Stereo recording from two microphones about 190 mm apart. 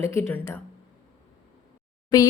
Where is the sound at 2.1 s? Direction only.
20° left (ahead or behind).